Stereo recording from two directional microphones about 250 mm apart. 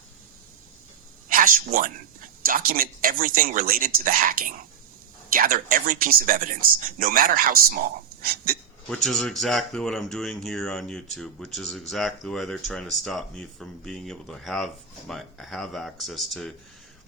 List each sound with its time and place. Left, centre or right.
1.3 s a sound: right
2.4 s speech: right
8.9 s speech: centre